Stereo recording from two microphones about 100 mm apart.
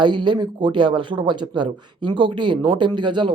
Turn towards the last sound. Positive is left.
turn(degrees=-50)  # may be behind; listen again after turning